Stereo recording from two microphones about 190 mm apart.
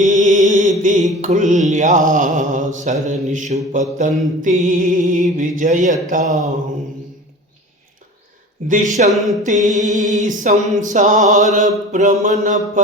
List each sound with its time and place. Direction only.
0.0 s music: 40° right (ahead or behind)
1.2 s mantra: 40° right (ahead or behind)
8.6 s mantra: 45° right (ahead or behind)